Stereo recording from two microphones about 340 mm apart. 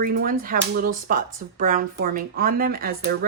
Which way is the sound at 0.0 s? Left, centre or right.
Right.